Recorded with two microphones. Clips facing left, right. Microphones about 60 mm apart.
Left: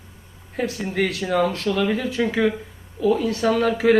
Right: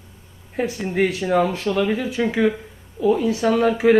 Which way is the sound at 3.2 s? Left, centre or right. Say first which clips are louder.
Right 2 dB; centre.